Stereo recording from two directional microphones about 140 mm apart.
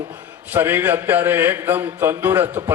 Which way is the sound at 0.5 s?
15° right (ahead or behind).